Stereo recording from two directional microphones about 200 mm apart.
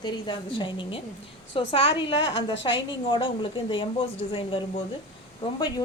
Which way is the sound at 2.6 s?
60° left (ahead or behind).